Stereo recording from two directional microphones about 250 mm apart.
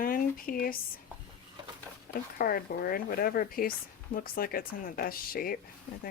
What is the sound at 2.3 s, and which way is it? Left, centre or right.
Speech, left.